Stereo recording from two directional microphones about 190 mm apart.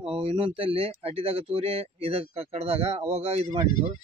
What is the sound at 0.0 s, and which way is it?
Speech, 30° right (ahead or behind).